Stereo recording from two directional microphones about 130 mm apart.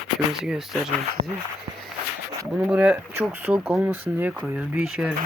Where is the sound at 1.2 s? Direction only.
45° right (ahead or behind).